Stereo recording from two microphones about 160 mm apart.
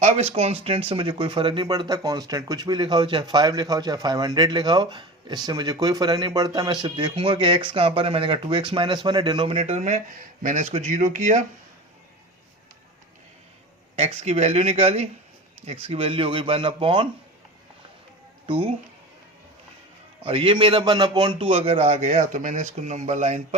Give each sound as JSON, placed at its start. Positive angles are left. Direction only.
{"t": 0.0, "sound": "a man's voice", "side_deg": -40}
{"t": 13.9, "sound": "a man's voice", "side_deg": -40}
{"t": 20.2, "sound": "a man's voice", "side_deg": -35}